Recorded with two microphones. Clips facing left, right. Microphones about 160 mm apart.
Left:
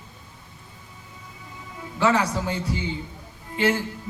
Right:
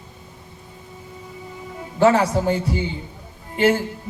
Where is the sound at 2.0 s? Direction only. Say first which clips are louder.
Right 6 dB; 45° right (ahead or behind).